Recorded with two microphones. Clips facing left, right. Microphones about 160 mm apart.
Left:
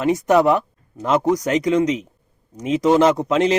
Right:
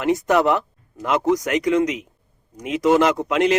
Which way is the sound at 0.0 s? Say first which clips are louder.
Left 2 dB; 20° left (ahead or behind).